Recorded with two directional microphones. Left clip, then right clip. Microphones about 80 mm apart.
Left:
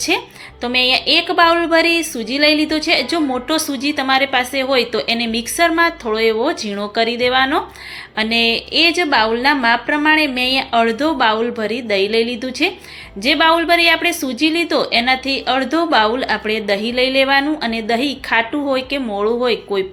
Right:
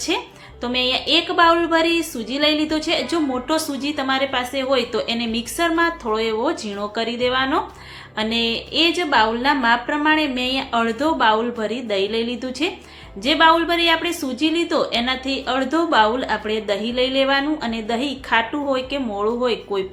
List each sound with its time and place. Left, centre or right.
0.6 s a woman's voice: left